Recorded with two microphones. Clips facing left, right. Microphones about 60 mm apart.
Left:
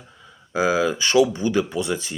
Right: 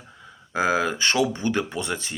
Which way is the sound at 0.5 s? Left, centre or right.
Right.